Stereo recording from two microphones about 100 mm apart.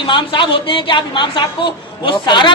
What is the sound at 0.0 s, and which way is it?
A woman's voice, 60° left (ahead or behind).